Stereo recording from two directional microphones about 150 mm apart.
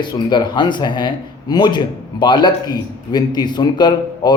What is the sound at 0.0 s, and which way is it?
Speech, 30° left (ahead or behind).